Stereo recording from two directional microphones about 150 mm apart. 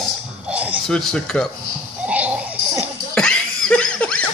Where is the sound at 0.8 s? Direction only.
5° left (ahead or behind).